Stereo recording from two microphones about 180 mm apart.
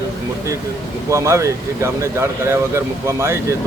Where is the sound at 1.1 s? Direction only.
15° right (ahead or behind).